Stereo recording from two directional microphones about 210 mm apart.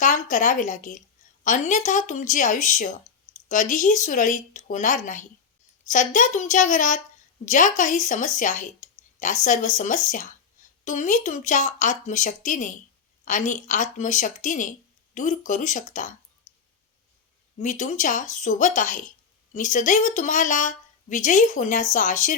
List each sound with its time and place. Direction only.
0.0 s speech: 35° left (ahead or behind)
17.6 s speech: 35° left (ahead or behind)